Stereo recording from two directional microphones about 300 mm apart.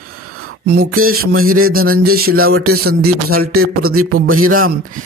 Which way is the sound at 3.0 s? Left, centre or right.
Right.